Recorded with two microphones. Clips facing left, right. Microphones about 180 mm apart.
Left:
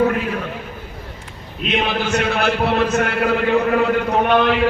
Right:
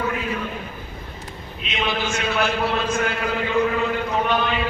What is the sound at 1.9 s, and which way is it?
A man's voice, 65° left (ahead or behind).